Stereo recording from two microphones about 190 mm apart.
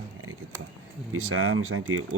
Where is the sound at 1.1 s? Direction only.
90° right.